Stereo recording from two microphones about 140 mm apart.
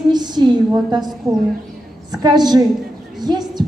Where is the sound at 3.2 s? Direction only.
30° right (ahead or behind).